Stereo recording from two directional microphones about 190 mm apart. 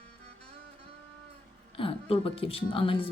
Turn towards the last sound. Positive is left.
turn(degrees=30)  # may be behind; listen again after turning